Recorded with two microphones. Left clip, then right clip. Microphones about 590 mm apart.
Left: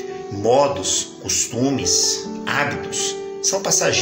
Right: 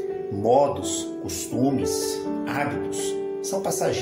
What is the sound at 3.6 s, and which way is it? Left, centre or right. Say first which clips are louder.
Speech: left 5 dB; right.